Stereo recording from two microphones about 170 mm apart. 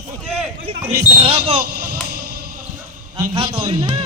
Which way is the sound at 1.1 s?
35° right (ahead or behind).